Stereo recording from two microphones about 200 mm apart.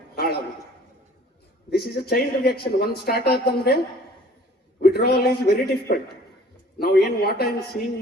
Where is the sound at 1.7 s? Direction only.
50° left (ahead or behind).